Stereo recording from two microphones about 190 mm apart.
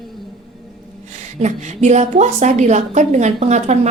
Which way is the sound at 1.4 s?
35° right (ahead or behind).